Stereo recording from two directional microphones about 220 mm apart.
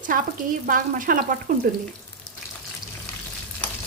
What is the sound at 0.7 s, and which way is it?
Speech, 40° right (ahead or behind).